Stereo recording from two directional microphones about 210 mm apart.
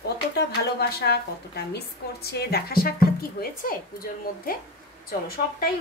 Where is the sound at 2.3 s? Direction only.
45° left (ahead or behind).